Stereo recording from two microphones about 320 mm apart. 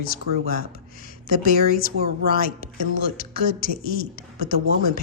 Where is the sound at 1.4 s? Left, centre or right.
Left.